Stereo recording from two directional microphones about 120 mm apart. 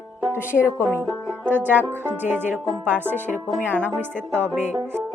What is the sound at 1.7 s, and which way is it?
Speech, 15° right (ahead or behind).